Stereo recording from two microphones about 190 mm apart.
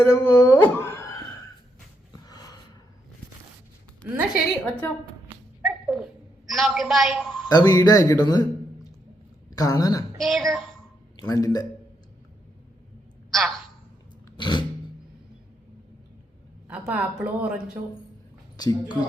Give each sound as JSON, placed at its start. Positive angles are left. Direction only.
{"t": 0.1, "sound": "speech", "side_deg": 15}
{"t": 2.2, "sound": "gasp", "side_deg": 20}
{"t": 4.0, "sound": "a woman's voice", "side_deg": 5}
{"t": 5.6, "sound": "a sound", "side_deg": -5}
{"t": 6.5, "sound": "a woman's voice", "side_deg": 0}
{"t": 7.4, "sound": "a woman's voice", "side_deg": 20}
{"t": 10.2, "sound": "a woman's voice", "side_deg": 0}
{"t": 11.2, "sound": "a woman's voice", "side_deg": 20}
{"t": 14.3, "sound": "a sound", "side_deg": 25}
{"t": 16.6, "sound": "a woman's voice", "side_deg": -5}
{"t": 18.5, "sound": "speech", "side_deg": 20}